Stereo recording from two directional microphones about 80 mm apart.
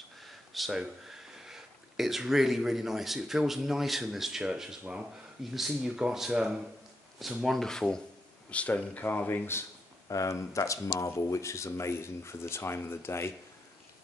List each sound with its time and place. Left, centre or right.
0.2 s speech: centre; by 9.7 s left
10.0 s speech: left